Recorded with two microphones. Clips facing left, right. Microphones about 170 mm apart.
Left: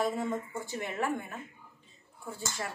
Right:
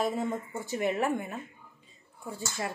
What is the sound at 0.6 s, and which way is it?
Speech, 20° right (ahead or behind).